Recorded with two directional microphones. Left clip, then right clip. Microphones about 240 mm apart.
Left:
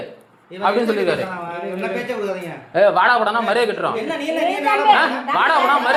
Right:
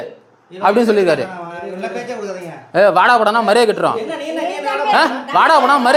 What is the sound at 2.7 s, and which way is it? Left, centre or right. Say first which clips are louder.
Speech: right 3 dB; right.